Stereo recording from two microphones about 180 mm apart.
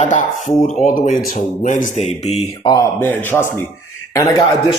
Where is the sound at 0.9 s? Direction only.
45° left (ahead or behind).